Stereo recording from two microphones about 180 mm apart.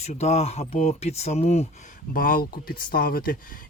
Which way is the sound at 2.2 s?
50° left (ahead or behind).